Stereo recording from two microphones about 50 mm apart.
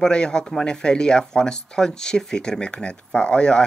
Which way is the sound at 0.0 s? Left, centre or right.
Centre.